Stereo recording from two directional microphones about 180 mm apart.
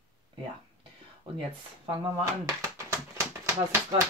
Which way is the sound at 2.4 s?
15° right (ahead or behind).